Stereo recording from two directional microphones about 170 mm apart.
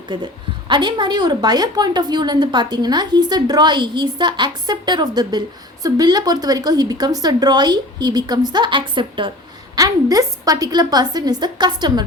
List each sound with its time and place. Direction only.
0.1 s a woman's voice: 25° right (ahead or behind)